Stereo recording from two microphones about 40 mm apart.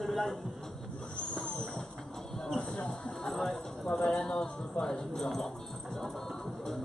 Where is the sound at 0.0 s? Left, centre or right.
Centre.